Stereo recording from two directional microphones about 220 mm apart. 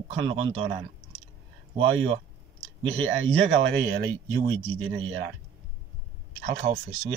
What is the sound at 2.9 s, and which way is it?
Speech, 65° right (ahead or behind).